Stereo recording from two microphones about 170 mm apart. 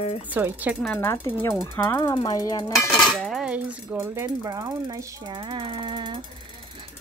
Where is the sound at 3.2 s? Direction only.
Centre (ahead or behind).